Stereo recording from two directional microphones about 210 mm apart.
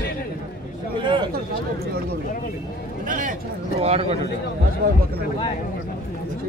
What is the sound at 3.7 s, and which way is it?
Speech, 30° right (ahead or behind).